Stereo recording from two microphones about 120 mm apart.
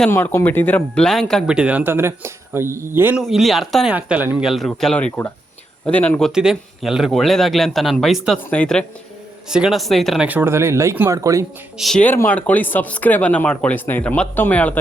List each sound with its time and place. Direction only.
0.1 s speech: 20° left (ahead or behind)
1.5 s speech: 10° right (ahead or behind)
3.2 s speech: centre (ahead or behind)
3.9 s speech: 15° right (ahead or behind)
4.4 s speech: centre (ahead or behind)
6.3 s speech: 5° right (ahead or behind)
8.4 s speech: 10° left (ahead or behind)
9.5 s speech: 5° right (ahead or behind)
10.2 s speech: 15° right (ahead or behind)
11.8 s speech: centre (ahead or behind)
12.0 s speech: 15° left (ahead or behind)